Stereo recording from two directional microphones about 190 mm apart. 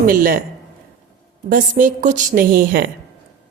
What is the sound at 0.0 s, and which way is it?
Speech, 45° right (ahead or behind).